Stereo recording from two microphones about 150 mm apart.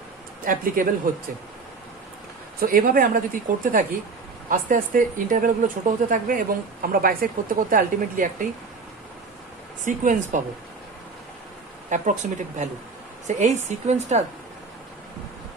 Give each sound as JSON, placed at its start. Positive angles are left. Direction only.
{"t": 0.4, "sound": "speech", "side_deg": -65}
{"t": 2.6, "sound": "speech", "side_deg": -75}
{"t": 9.8, "sound": "speech", "side_deg": -60}
{"t": 11.9, "sound": "speech", "side_deg": -55}